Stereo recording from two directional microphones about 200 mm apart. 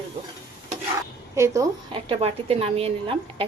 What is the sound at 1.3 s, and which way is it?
Speech, 15° right (ahead or behind).